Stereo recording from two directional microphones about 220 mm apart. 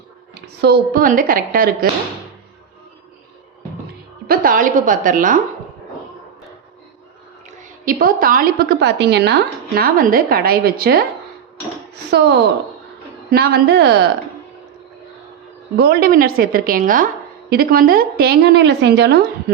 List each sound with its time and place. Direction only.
0.3 s a woman's voice: 45° right (ahead or behind)
4.3 s a woman's voice: 40° right (ahead or behind)
7.9 s a woman's voice: 40° right (ahead or behind)
12.1 s a woman's voice: 50° right (ahead or behind)
15.8 s a woman's voice: 45° right (ahead or behind)